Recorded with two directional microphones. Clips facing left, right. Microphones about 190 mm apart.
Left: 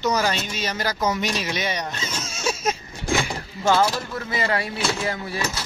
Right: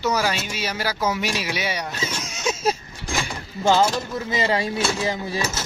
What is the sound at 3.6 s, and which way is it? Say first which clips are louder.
Speech: right 1 dB; 20° right (ahead or behind).